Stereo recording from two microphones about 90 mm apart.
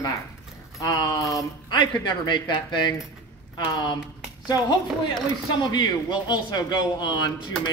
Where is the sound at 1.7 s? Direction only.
55° left (ahead or behind).